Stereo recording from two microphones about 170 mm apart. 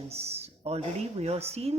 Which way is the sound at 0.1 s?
35° right (ahead or behind).